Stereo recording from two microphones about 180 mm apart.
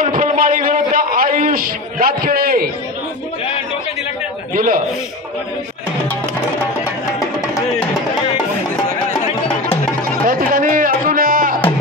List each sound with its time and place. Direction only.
0.0 s a sound: 50° right (ahead or behind)
4.6 s a man's voice: 50° right (ahead or behind)
10.2 s music: 50° right (ahead or behind)